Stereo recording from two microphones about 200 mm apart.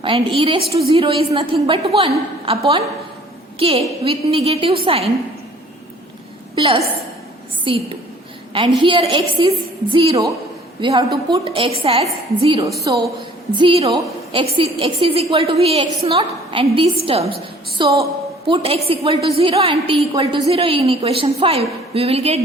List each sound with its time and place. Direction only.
0.0 s a woman's voice: 25° right (ahead or behind)
3.6 s a woman's voice: 30° right (ahead or behind)
6.6 s a woman's voice: 30° right (ahead or behind)